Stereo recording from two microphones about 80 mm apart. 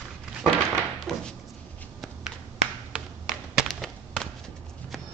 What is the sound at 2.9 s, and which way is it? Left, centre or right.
Tap, centre.